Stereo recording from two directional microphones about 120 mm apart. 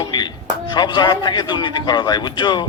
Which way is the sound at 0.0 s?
40° left (ahead or behind).